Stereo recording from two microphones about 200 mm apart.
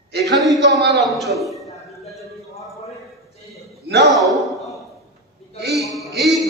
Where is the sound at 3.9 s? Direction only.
60° right (ahead or behind).